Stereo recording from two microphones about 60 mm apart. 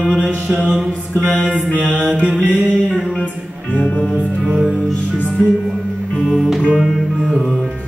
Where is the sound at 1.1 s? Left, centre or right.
Left.